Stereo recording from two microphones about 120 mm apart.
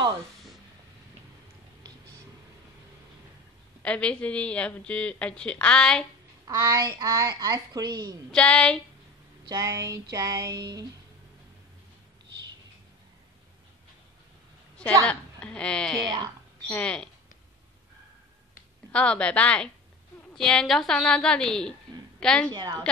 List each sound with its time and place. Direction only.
3.8 s speech: 10° left (ahead or behind)
6.5 s a woman's voice: 25° right (ahead or behind)
8.3 s speech: 10° left (ahead or behind)
9.5 s female singing: 30° right (ahead or behind)
15.0 s speech: 10° left (ahead or behind)
18.9 s a woman's voice: 10° left (ahead or behind)
22.5 s a woman's voice: 35° right (ahead or behind)